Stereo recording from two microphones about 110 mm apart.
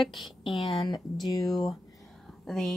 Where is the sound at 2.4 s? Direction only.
5° left (ahead or behind).